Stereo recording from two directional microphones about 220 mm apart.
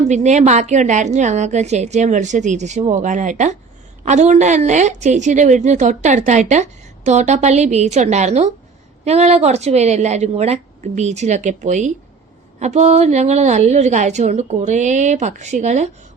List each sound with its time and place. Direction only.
0.1 s a woman's voice: 30° right (ahead or behind)